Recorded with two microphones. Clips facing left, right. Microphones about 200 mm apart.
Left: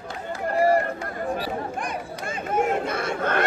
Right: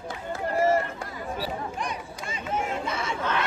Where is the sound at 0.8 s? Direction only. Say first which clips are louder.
Left 6 dB; 55° left (ahead or behind).